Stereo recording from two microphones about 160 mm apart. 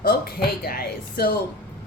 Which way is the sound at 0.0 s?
70° left (ahead or behind).